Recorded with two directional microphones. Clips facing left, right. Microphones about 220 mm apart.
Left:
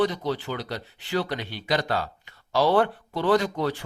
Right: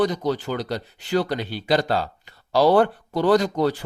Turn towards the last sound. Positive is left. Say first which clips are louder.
# right 4 dB
turn(degrees=-35)  # may be behind; listen again after turning